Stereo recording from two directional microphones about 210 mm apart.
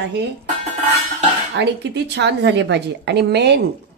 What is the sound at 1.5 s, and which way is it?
A woman's voice, 55° right (ahead or behind).